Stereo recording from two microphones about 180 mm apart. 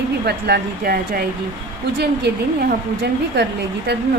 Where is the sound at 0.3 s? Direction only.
60° right (ahead or behind).